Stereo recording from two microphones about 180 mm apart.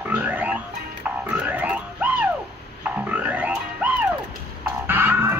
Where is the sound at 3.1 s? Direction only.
10° right (ahead or behind).